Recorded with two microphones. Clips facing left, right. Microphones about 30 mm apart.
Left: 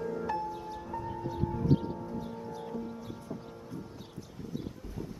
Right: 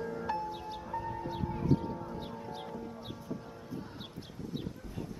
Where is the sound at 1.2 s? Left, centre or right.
Right.